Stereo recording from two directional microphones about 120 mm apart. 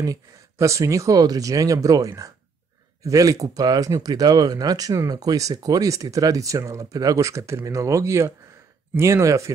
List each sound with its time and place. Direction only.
0.0 s speech: 25° right (ahead or behind)